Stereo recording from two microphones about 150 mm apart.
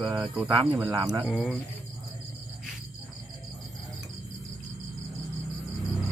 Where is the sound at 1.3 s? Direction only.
Centre (ahead or behind).